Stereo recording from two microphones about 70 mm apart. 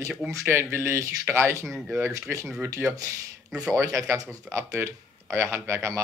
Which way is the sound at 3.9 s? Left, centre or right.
Right.